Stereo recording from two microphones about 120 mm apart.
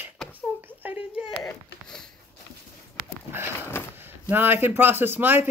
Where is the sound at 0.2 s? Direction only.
Centre (ahead or behind).